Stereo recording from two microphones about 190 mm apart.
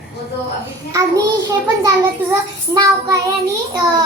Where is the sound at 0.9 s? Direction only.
20° right (ahead or behind).